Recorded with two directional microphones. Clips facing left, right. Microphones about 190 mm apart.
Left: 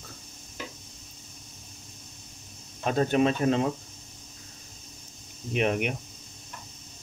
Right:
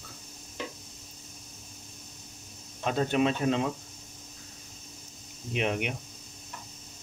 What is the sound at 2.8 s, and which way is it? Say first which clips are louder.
Speech: left 3 dB; 45° left (ahead or behind).